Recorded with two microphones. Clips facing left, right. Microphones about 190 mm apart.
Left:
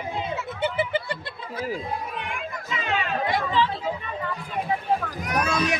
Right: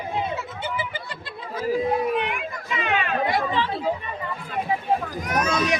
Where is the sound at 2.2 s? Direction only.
70° right (ahead or behind).